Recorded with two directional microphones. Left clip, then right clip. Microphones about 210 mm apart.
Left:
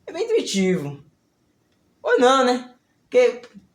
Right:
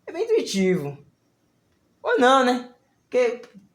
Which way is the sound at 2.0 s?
25° right (ahead or behind).